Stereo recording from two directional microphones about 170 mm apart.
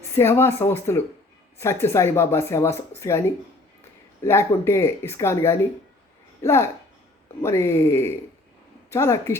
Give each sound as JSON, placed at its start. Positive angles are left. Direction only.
{"t": 0.1, "sound": "speech", "side_deg": 15}